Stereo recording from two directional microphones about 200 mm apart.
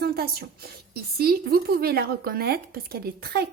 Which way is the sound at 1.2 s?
50° right (ahead or behind).